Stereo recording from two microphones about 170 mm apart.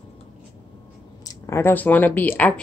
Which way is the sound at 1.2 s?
15° left (ahead or behind).